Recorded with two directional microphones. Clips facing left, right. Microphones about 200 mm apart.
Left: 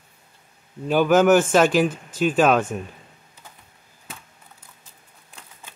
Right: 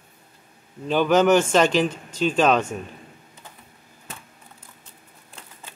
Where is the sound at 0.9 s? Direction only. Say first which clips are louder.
Left 2 dB; 10° left (ahead or behind).